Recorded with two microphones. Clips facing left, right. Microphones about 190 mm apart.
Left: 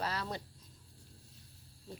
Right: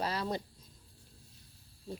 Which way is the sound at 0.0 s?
15° right (ahead or behind).